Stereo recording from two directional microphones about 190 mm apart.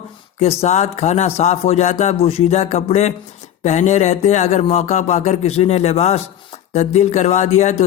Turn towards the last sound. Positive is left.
turn(degrees=35)  # may be behind; listen again after turning